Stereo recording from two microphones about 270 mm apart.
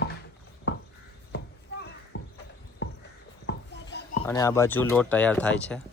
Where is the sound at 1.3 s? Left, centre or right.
Left.